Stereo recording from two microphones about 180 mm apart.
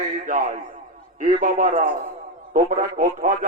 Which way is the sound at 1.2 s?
45° right (ahead or behind).